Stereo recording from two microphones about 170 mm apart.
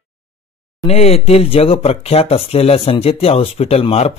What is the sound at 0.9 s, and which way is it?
Speech, 35° left (ahead or behind).